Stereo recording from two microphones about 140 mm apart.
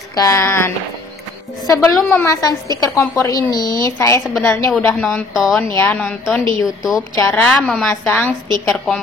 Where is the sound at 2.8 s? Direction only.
25° left (ahead or behind).